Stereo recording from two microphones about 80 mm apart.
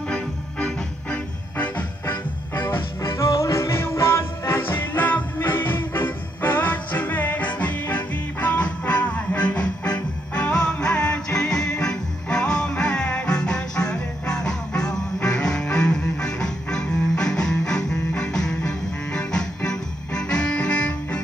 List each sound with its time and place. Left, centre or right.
0.1 s music: centre
2.0 s music: left; by 21.2 s centre